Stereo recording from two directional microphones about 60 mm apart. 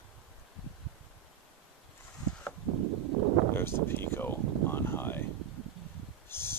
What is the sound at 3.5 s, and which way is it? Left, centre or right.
Speech, left.